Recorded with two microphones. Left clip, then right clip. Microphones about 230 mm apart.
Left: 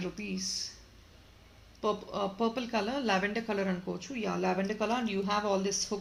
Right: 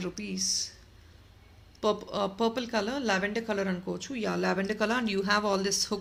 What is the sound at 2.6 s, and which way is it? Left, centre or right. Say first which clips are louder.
Speech: right 2 dB; centre.